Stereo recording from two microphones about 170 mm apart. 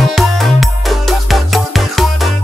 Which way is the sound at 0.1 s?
Centre (ahead or behind).